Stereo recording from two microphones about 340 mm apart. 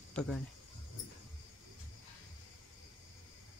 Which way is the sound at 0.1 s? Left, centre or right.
Centre.